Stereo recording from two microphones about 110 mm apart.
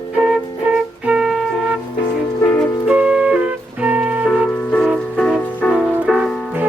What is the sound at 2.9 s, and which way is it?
Music, 5° right (ahead or behind).